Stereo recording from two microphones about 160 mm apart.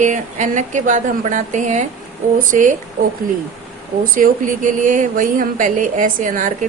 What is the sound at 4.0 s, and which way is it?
A woman's voice, 55° right (ahead or behind).